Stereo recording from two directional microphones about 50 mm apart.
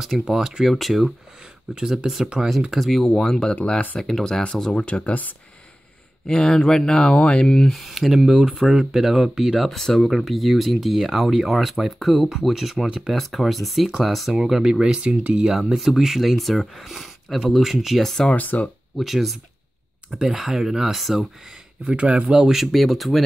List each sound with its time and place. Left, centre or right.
0.3 s speech: centre
1.8 s speech: centre; by 5.1 s left
6.2 s speech: centre
7.7 s speech: centre
14.4 s speech: centre
15.0 s speech: right
15.5 s speech: centre
18.0 s speech: centre
18.3 s speech: left
18.9 s speech: centre
21.8 s speech: right
22.3 s speech: centre